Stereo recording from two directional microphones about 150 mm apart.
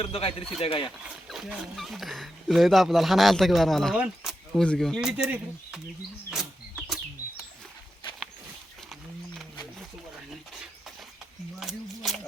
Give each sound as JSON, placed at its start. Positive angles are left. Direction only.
{"t": 0.0, "sound": "speech", "side_deg": 40}
{"t": 1.0, "sound": "speech", "side_deg": -5}
{"t": 6.3, "sound": "bird", "side_deg": 0}
{"t": 12.0, "sound": "a sound", "side_deg": 0}